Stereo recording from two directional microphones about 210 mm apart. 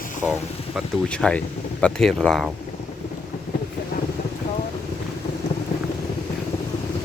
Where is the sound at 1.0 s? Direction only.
5° left (ahead or behind).